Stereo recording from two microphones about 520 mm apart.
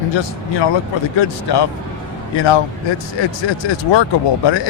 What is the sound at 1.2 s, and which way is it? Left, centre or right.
Speech, left.